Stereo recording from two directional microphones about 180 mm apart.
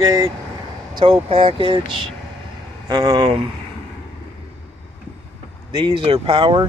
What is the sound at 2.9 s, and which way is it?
Speech, 25° right (ahead or behind).